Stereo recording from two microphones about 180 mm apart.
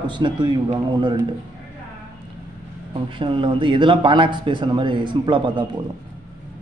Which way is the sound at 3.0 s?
30° right (ahead or behind).